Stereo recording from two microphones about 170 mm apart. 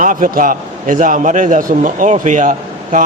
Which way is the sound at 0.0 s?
50° right (ahead or behind).